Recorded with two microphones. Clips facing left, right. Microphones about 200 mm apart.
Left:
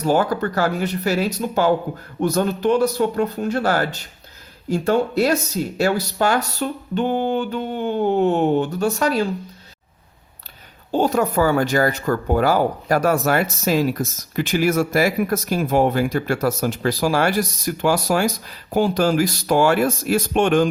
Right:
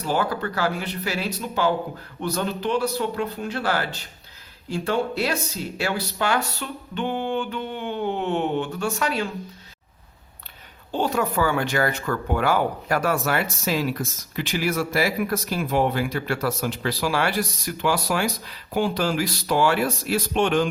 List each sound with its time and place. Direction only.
0.0 s speech: 45° left (ahead or behind)
10.9 s speech: 40° left (ahead or behind)